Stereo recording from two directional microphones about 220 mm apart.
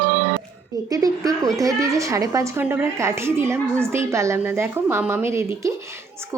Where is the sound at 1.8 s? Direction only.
15° right (ahead or behind).